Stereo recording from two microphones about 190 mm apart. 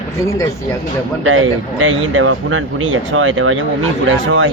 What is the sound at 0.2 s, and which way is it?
Speech, 15° left (ahead or behind).